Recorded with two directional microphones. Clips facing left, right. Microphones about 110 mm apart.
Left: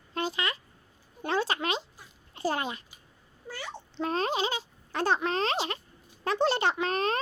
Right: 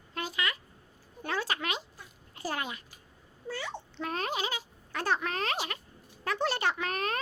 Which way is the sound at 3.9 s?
25° left (ahead or behind).